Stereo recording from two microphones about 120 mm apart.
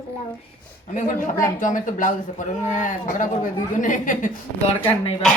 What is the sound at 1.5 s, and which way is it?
Speech, 90° left.